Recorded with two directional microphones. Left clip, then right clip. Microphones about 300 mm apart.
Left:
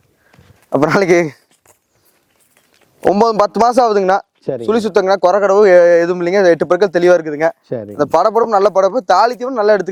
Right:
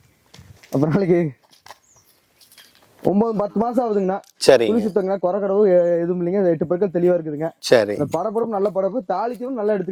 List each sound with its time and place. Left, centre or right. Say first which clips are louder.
0.7 s speech: left 8 dB; centre
3.1 s speech: left 9 dB; centre
4.4 s speech: right 9 dB; centre
4.7 s speech: left 8 dB; centre
6.6 s speech: left 7 dB; centre
7.6 s speech: right 9 dB; centre
7.9 s speech: left 10 dB; centre